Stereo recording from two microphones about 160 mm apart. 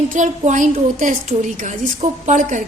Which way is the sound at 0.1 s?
50° right (ahead or behind).